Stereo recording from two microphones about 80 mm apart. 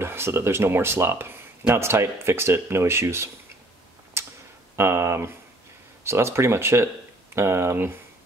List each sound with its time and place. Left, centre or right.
0.0 s speech: right
4.2 s tick-tock: right
4.7 s speech: right